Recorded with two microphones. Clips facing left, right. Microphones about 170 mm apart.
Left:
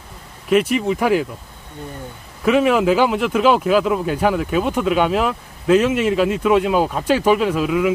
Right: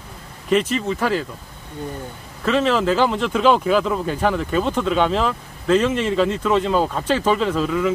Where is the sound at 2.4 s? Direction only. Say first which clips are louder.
Left 3 dB; 10° left (ahead or behind).